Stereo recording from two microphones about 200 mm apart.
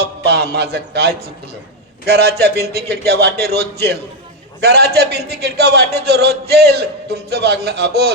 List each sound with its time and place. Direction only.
0.0 s a man's voice: 55° right (ahead or behind)